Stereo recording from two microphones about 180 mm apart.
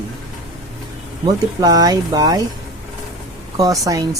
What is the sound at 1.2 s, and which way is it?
Speech, 20° right (ahead or behind).